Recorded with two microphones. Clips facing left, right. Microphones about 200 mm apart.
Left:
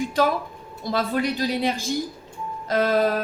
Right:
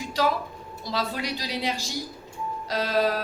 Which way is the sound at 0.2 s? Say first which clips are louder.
Left 2 dB; 50° left (ahead or behind).